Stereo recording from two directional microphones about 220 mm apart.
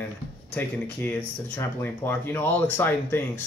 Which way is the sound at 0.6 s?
10° left (ahead or behind).